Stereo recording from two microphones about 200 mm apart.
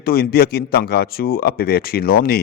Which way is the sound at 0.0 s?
50° left (ahead or behind).